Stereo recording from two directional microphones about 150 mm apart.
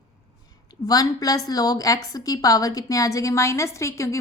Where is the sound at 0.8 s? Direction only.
25° left (ahead or behind).